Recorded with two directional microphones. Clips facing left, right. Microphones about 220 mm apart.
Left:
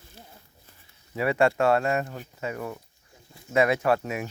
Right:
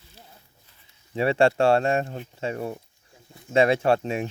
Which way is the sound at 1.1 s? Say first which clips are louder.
Right 3 dB; 30° right (ahead or behind).